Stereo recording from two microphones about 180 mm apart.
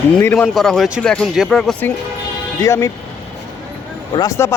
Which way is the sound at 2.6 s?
15° left (ahead or behind).